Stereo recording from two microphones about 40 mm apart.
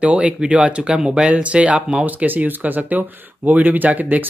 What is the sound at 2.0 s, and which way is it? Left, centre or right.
Speech, right.